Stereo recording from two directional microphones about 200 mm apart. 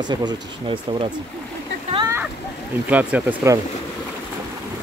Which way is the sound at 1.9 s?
15° right (ahead or behind).